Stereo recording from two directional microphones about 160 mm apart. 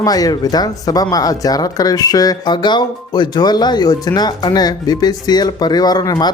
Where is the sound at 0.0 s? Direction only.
25° left (ahead or behind).